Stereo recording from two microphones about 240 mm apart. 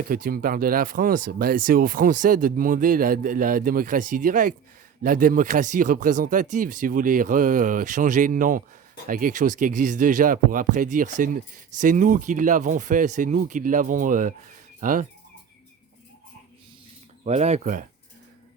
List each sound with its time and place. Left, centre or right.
0.1 s speech: right
14.8 s bird: right
17.2 s speech: right